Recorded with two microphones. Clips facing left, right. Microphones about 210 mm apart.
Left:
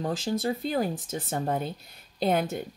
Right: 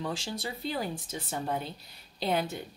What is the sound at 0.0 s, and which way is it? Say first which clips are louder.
A woman's voice: left 7 dB; 45° left (ahead or behind).